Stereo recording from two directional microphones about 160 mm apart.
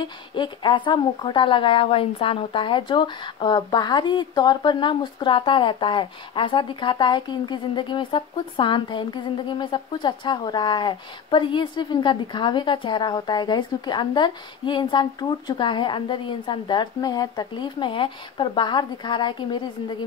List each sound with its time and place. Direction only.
0.0 s speech: 30° left (ahead or behind)